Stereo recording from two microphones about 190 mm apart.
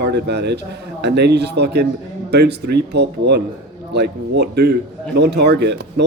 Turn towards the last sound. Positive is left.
turn(degrees=-65)  # may be behind; listen again after turning